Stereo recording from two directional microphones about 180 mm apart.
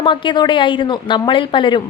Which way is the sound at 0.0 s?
25° left (ahead or behind).